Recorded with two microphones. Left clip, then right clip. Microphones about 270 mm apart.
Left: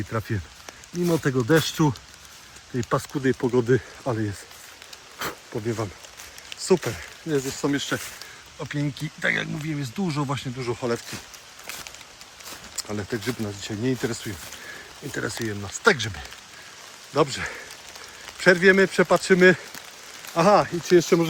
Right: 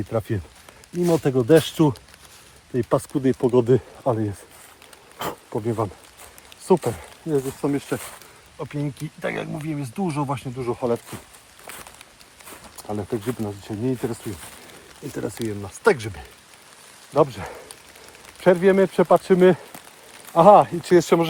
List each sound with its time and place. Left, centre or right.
0.1 s speech: centre
5.5 s speech: right
7.3 s speech: centre
12.9 s speech: centre
17.2 s speech: centre; by 21.0 s right